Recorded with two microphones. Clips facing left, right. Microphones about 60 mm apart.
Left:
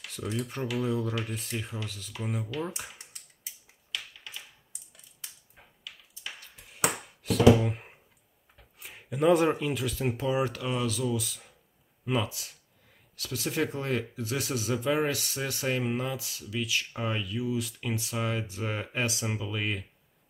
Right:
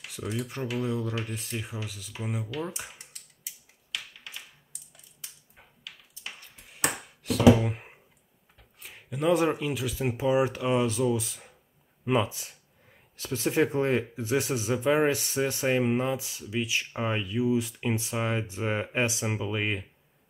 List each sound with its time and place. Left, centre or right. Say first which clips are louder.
0.0 s speech: even; centre
3.9 s a sound: right 1 dB; centre
8.5 s speech: even; centre
10.2 s speech: right 6 dB; centre